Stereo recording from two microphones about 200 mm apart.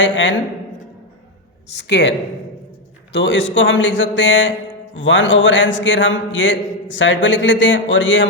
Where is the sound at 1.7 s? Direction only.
60° left (ahead or behind).